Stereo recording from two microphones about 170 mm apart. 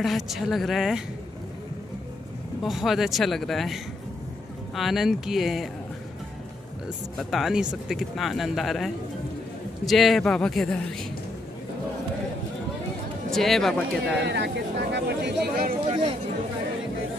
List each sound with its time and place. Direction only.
0.0 s speech: centre (ahead or behind)
2.6 s speech: centre (ahead or behind)
7.2 s speech: centre (ahead or behind)
13.3 s speech: centre (ahead or behind)
14.2 s speech: 85° right; by 15.7 s 65° right (ahead or behind)